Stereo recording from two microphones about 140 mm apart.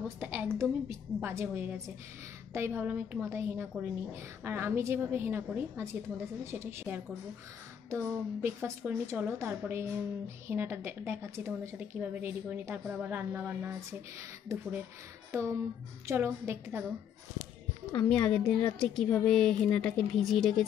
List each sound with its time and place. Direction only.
0.2 s a woman's voice: 10° right (ahead or behind)
18.0 s speech: 5° left (ahead or behind)